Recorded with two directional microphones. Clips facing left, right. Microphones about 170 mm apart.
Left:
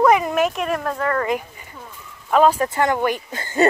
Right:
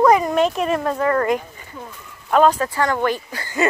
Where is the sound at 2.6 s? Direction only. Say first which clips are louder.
Left 1 dB; 20° left (ahead or behind).